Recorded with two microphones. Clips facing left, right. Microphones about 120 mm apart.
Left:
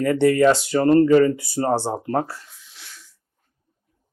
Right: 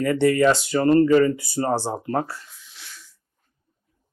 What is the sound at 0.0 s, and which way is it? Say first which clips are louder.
Speech: left 2 dB; 40° left (ahead or behind).